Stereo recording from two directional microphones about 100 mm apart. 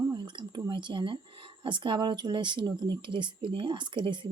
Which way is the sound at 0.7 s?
50° right (ahead or behind).